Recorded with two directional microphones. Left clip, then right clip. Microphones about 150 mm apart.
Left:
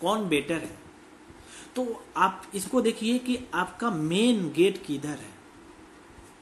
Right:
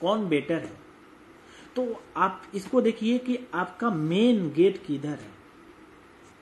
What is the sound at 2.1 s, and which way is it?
A man's voice, 20° right (ahead or behind).